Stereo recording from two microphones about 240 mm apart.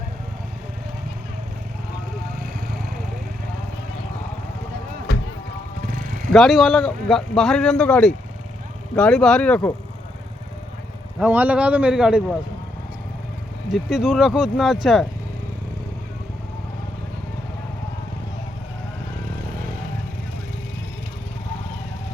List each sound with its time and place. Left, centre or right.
2.4 s a sound: right
5.8 s vehicle: right
6.3 s speech: centre
11.2 s speech: centre
13.7 s speech: centre